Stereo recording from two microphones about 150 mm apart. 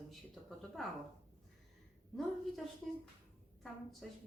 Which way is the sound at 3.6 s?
Centre (ahead or behind).